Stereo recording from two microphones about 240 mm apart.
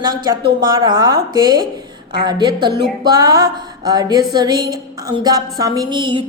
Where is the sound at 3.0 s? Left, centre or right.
Centre.